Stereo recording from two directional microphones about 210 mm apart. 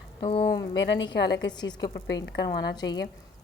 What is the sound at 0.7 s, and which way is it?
Speech, 60° left (ahead or behind).